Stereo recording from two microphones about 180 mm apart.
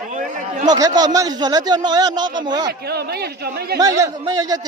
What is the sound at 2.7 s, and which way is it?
Speech, 60° right (ahead or behind).